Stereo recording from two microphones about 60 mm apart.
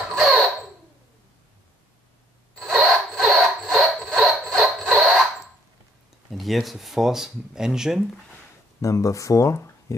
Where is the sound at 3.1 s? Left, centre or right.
Centre.